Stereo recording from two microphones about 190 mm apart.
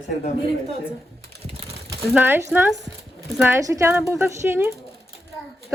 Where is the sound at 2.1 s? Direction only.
10° right (ahead or behind).